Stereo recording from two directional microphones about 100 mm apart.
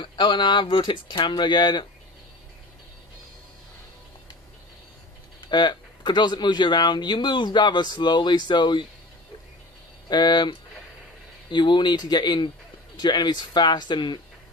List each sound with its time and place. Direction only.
0.0 s speech: 50° left (ahead or behind)
5.5 s speech: 50° left (ahead or behind)
10.0 s speech: 45° left (ahead or behind)